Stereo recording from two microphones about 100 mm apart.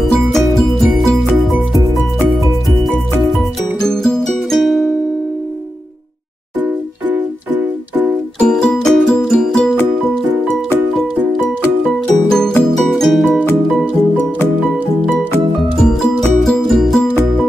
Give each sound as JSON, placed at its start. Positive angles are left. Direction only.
{"t": 0.0, "sound": "music", "side_deg": 0}
{"t": 3.8, "sound": "music", "side_deg": 5}
{"t": 7.1, "sound": "keyboard", "side_deg": -15}
{"t": 8.4, "sound": "music", "side_deg": 10}
{"t": 11.8, "sound": "music", "side_deg": 5}
{"t": 15.8, "sound": "music", "side_deg": 5}